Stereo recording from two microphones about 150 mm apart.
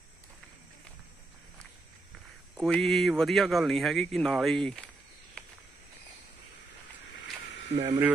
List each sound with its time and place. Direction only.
2.6 s speech: 5° left (ahead or behind)
5.4 s a sound: 5° left (ahead or behind)
7.7 s speech: 40° right (ahead or behind)